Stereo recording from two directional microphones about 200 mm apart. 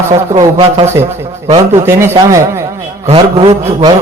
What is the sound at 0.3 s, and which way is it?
A man's voice, 30° right (ahead or behind).